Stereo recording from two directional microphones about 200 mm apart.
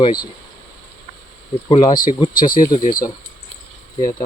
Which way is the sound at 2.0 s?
20° left (ahead or behind).